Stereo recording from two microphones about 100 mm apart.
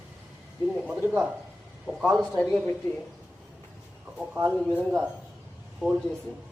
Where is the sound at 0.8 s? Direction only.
10° right (ahead or behind).